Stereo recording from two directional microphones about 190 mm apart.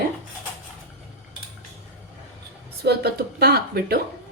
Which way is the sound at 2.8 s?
55° right (ahead or behind).